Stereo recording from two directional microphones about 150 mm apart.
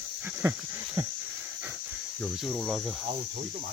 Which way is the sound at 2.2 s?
Centre (ahead or behind).